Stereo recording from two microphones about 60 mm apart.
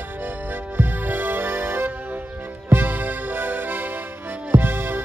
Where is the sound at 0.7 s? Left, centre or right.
Right.